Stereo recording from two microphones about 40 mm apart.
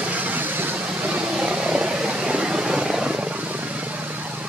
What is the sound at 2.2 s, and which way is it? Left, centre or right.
Vehicle, right.